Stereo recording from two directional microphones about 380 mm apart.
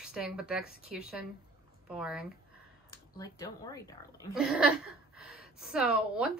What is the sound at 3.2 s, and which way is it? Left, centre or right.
Speech, centre.